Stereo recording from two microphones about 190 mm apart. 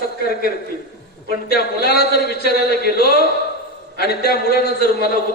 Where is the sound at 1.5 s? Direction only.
55° left (ahead or behind).